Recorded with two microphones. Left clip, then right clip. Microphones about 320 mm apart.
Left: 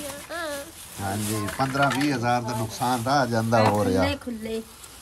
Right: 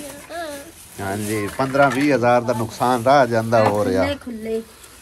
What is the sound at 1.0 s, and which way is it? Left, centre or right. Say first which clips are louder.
Speech: right 5 dB; centre.